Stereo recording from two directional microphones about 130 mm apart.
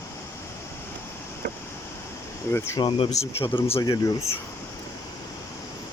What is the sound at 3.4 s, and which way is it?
Speech, 40° left (ahead or behind).